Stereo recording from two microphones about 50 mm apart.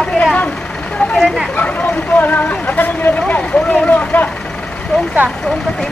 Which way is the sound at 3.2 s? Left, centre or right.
Left.